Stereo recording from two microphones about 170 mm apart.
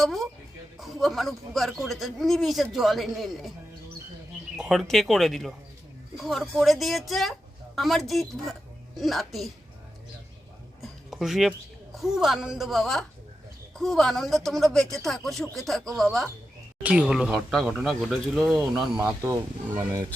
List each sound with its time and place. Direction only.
0.0 s speech: centre (ahead or behind)
4.5 s speech: centre (ahead or behind)
11.1 s speech: centre (ahead or behind)
19.0 s speech: 10° right (ahead or behind)